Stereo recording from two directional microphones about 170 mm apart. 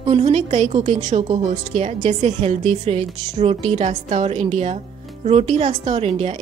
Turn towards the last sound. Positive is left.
turn(degrees=-40)  # may be behind; listen again after turning